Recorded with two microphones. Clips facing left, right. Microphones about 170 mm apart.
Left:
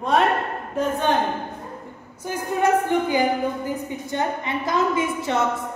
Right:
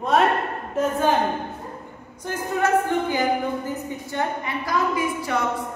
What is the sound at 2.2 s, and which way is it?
A woman's voice, 15° left (ahead or behind).